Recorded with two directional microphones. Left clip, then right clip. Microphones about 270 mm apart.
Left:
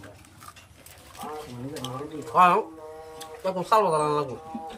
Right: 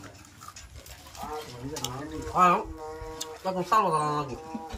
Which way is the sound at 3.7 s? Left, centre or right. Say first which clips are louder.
Left 3 dB; centre.